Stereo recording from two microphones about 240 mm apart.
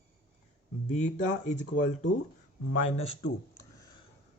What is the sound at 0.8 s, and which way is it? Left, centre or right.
Speech, left.